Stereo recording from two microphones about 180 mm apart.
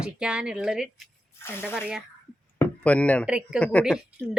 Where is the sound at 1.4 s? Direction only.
15° left (ahead or behind).